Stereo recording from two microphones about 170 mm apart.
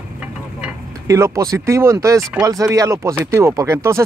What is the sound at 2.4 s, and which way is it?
Speech, 20° right (ahead or behind).